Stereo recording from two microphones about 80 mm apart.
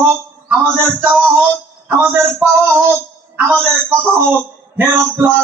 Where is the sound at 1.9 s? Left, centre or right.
Right.